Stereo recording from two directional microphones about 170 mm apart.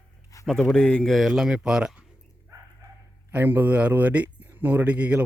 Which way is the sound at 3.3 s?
10° right (ahead or behind).